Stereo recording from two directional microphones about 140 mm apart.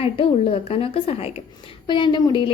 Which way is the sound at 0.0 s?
40° left (ahead or behind).